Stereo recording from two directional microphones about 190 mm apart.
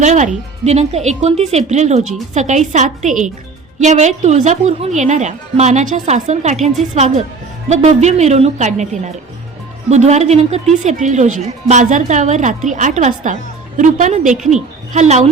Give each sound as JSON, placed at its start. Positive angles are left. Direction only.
{"t": 0.0, "sound": "a woman's voice", "side_deg": -35}
{"t": 9.9, "sound": "a woman's voice", "side_deg": -35}